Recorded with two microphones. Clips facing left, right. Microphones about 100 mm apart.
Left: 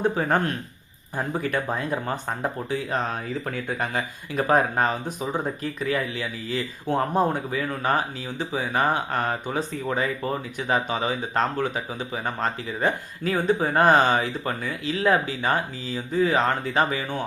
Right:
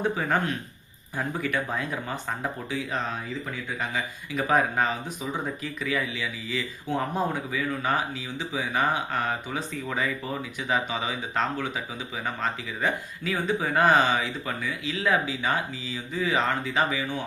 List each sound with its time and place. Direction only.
0.2 s speech: 45° left (ahead or behind)